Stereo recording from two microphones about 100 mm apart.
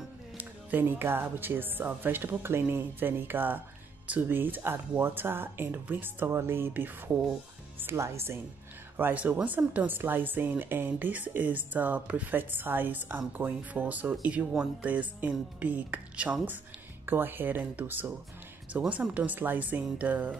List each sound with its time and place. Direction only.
0.4 s speech: 15° right (ahead or behind)
8.9 s speech: 15° right (ahead or behind)